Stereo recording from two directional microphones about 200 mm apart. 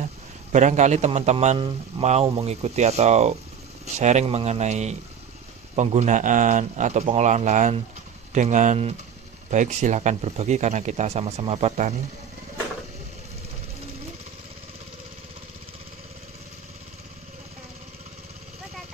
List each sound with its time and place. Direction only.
0.0 s a man's voice: 35° right (ahead or behind)